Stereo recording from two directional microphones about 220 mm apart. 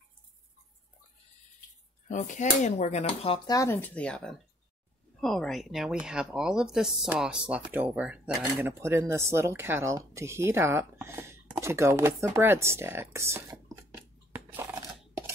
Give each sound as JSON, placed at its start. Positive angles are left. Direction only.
{"t": 2.0, "sound": "speech", "side_deg": 35}
{"t": 3.5, "sound": "speech", "side_deg": 10}
{"t": 14.3, "sound": "a sound", "side_deg": -10}